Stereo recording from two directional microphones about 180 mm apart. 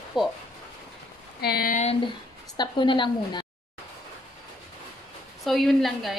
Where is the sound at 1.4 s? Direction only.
60° left (ahead or behind).